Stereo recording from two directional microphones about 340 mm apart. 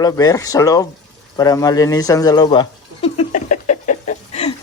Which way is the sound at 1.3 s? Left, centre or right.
Centre.